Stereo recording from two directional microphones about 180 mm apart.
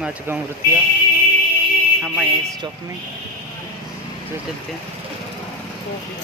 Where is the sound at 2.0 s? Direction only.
10° right (ahead or behind).